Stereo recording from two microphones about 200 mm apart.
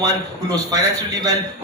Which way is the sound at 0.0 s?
20° right (ahead or behind).